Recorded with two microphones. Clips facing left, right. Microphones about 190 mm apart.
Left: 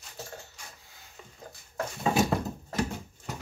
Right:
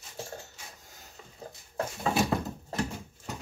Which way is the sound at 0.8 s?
45° right (ahead or behind).